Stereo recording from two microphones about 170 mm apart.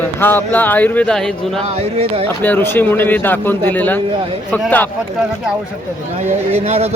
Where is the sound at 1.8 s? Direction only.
35° right (ahead or behind).